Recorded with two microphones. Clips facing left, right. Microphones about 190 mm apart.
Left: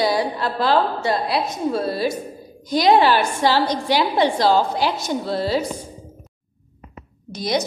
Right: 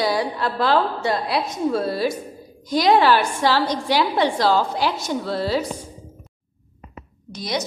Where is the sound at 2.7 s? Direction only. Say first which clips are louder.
Left 1 dB; 20° left (ahead or behind).